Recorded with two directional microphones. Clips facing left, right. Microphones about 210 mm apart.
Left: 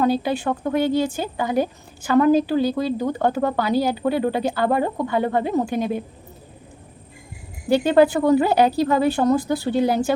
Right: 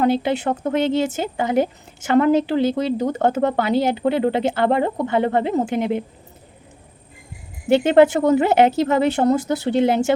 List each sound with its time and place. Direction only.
0.8 s a woman's voice: 20° right (ahead or behind)
7.7 s a woman's voice: 20° right (ahead or behind)